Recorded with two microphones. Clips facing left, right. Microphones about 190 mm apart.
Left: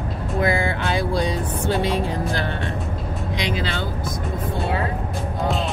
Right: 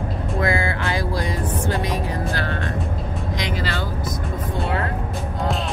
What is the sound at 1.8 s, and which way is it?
Music, 25° left (ahead or behind).